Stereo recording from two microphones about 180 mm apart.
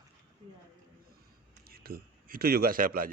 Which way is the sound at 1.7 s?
55° right (ahead or behind).